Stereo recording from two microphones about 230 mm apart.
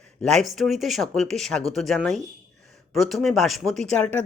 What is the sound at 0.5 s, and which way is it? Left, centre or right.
Speech, centre.